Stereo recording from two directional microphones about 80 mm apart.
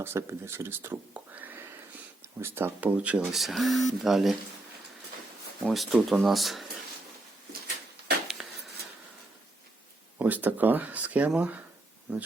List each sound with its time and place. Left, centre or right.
0.0 s speech: right
1.1 s whispering: right
2.4 s speech: right
3.3 s speech: centre
5.6 s speech: centre
8.4 s a sound: centre
10.2 s speech: right